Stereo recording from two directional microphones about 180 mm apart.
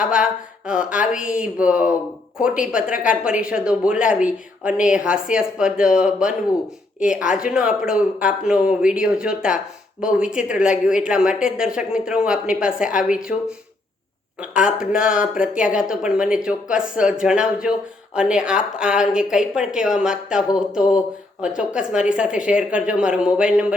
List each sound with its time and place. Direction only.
0.0 s a sound: 5° right (ahead or behind)
0.7 s speech: 5° right (ahead or behind)
14.5 s speech: 5° right (ahead or behind)